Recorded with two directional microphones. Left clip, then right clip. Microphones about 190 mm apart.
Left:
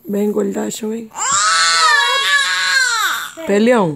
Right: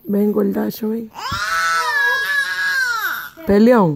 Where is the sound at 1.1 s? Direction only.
15° left (ahead or behind).